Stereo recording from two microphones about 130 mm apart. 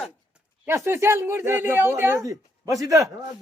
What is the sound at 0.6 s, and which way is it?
Speech, 20° right (ahead or behind).